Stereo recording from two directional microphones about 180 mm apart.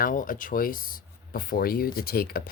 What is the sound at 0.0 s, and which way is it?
Speech, 50° left (ahead or behind).